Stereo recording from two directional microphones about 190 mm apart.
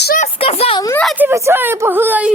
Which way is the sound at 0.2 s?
30° left (ahead or behind).